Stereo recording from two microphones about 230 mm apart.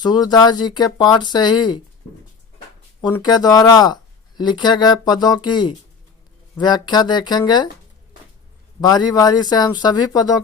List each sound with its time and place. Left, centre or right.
0.0 s speech: centre
3.0 s speech: centre
8.8 s speech: centre